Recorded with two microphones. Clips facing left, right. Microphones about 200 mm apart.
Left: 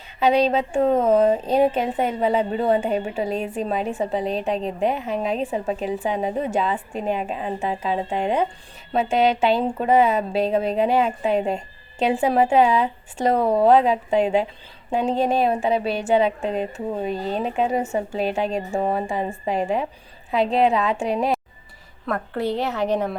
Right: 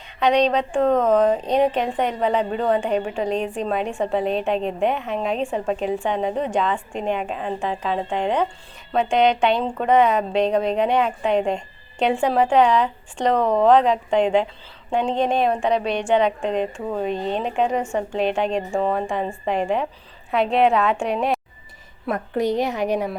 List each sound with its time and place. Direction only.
0.2 s a woman's voice: 5° left (ahead or behind)
18.7 s speech: 20° left (ahead or behind)
18.9 s a woman's voice: 5° left (ahead or behind)
22.0 s a woman's voice: 15° right (ahead or behind)